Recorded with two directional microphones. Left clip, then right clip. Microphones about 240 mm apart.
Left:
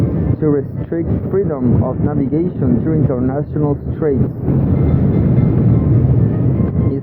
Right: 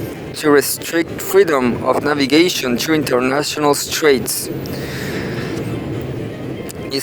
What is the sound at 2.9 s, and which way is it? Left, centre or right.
Speech, right.